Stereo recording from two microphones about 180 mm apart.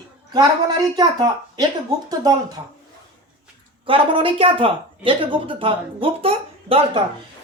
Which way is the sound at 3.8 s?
30° right (ahead or behind).